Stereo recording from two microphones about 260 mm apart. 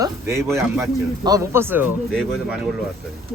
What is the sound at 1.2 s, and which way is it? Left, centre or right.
Speech, centre.